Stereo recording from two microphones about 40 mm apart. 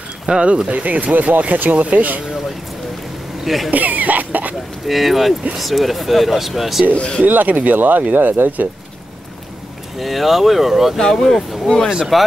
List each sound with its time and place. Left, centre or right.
0.3 s speech: right
3.4 s speech: centre
3.7 s cough: right
4.8 s speech: centre
7.2 s speech: right
9.9 s speech: centre
11.0 s speech: centre
12.1 s speech: centre